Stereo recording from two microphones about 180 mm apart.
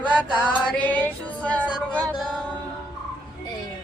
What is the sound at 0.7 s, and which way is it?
Music, 10° left (ahead or behind).